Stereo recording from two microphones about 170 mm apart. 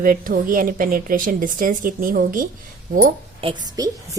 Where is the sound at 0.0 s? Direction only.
55° right (ahead or behind).